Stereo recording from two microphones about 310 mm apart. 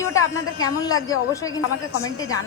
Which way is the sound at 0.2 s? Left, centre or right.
Left.